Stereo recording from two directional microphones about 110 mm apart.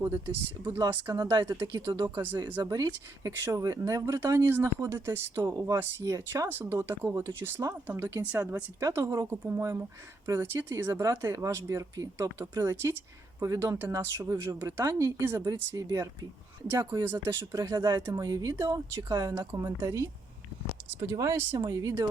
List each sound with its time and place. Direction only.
0.0 s speech: 20° right (ahead or behind)
1.1 s speech: 40° right (ahead or behind)
1.5 s speech: 25° right (ahead or behind)
2.6 s speech: 35° right (ahead or behind); by 6.1 s 20° right (ahead or behind)
6.1 s speech: 30° right (ahead or behind)
8.8 s speech: 30° right (ahead or behind)
19.3 s speech: 25° right (ahead or behind)